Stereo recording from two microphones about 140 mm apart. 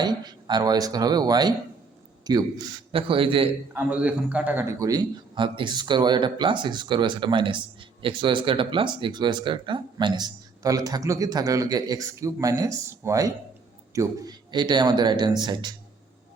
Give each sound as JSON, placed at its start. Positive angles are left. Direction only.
{"t": 0.0, "sound": "speech", "side_deg": -30}
{"t": 2.9, "sound": "a man's voice", "side_deg": -40}
{"t": 3.8, "sound": "a man's voice", "side_deg": -10}